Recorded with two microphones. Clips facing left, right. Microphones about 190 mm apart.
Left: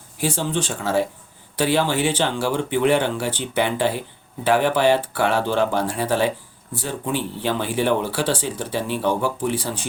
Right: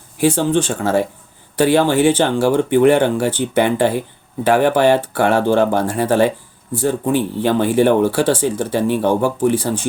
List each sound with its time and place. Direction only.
0.2 s speech: 55° right (ahead or behind)